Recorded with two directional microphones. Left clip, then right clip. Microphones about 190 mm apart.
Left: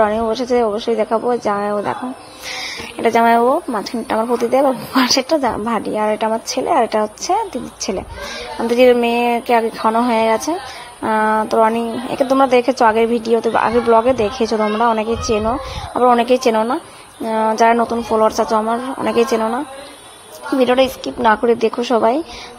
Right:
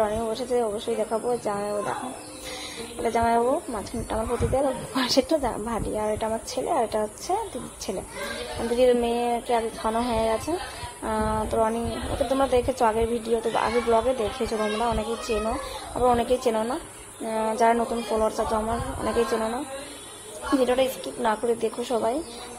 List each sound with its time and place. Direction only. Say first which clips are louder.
0.0 s a woman's voice: left 10 dB; 30° left (ahead or behind)
3.0 s speech: left 10 dB; 25° left (ahead or behind)
8.7 s speech: left 9 dB; 25° left (ahead or behind)
20.6 s a woman's voice: left 11 dB; 25° left (ahead or behind)